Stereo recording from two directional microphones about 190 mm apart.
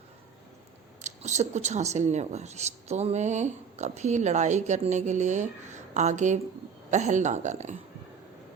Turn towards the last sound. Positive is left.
turn(degrees=-40)  # may be behind; listen again after turning